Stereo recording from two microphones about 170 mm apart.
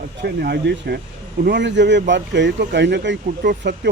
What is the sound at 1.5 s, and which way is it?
Speech, 90° right.